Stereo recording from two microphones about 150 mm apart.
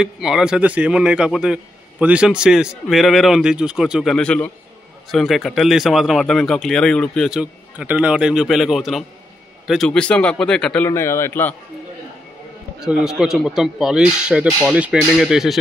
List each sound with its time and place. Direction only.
0.0 s speech: 5° right (ahead or behind)
10.9 s a man's voice: 20° left (ahead or behind)
12.8 s speech: 5° right (ahead or behind)